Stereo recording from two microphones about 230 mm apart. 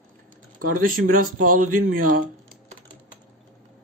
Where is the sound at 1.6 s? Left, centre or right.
Right.